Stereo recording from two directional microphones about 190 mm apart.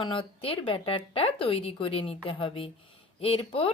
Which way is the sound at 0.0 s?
25° left (ahead or behind).